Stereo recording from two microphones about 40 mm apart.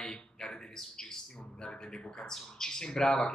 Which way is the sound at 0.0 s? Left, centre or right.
Centre.